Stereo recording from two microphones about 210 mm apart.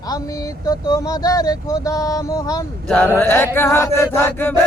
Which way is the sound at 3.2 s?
10° left (ahead or behind).